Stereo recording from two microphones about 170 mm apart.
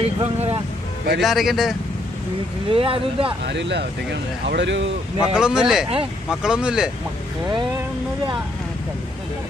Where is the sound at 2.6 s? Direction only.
35° right (ahead or behind).